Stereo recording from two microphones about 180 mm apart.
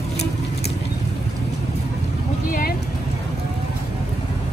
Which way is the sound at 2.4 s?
50° left (ahead or behind).